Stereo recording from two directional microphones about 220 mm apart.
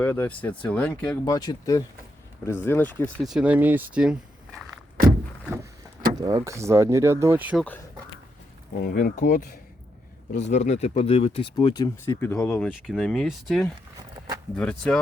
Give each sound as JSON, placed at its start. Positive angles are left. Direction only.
{"t": 0.0, "sound": "speech", "side_deg": 10}
{"t": 1.2, "sound": "speech", "side_deg": 20}
{"t": 6.1, "sound": "speech", "side_deg": -15}
{"t": 8.8, "sound": "speech", "side_deg": 40}
{"t": 10.4, "sound": "speech", "side_deg": 30}